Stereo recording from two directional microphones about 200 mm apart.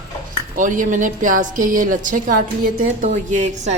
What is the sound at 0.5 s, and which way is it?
Speech, 40° right (ahead or behind).